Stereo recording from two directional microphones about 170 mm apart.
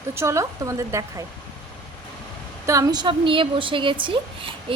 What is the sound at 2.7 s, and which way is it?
A woman's voice, 20° right (ahead or behind).